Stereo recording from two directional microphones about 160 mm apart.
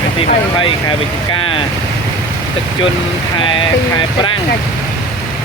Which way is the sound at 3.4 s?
30° left (ahead or behind).